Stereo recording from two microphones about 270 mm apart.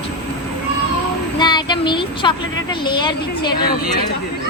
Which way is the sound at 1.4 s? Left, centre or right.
Centre.